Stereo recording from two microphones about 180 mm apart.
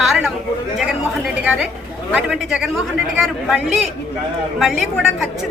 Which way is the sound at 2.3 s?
Centre (ahead or behind).